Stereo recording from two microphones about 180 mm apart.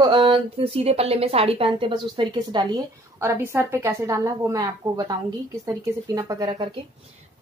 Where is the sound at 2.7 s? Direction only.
15° right (ahead or behind).